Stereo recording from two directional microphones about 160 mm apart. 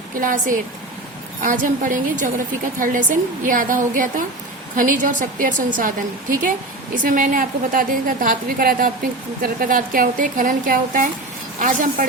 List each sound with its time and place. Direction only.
0.2 s a woman's voice: 55° right (ahead or behind)
6.9 s a woman's voice: 55° right (ahead or behind)